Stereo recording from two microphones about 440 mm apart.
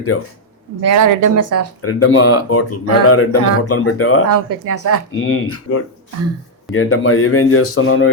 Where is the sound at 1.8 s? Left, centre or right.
Left.